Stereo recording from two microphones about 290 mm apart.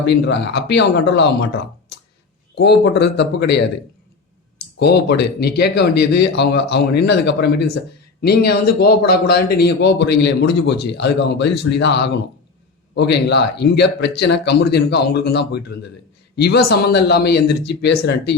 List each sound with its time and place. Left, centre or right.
0.1 s a man's voice: left
2.6 s a man's voice: left
4.8 s a man's voice: left